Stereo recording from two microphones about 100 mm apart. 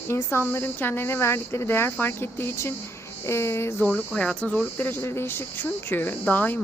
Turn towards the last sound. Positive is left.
turn(degrees=15)  # may be behind; listen again after turning